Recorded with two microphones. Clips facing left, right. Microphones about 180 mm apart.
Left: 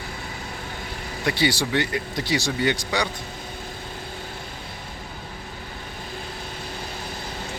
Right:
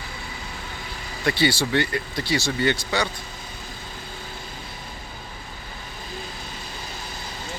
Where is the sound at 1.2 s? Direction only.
15° left (ahead or behind).